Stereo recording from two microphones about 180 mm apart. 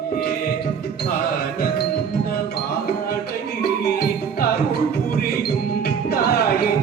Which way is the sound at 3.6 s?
60° left (ahead or behind).